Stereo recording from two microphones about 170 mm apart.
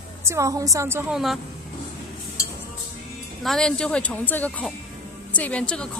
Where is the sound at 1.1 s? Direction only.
Centre (ahead or behind).